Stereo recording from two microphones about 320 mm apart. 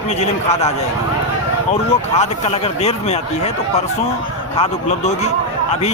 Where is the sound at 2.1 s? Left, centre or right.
Centre.